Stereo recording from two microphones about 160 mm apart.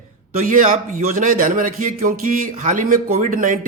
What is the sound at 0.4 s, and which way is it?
A man's voice, 60° right (ahead or behind).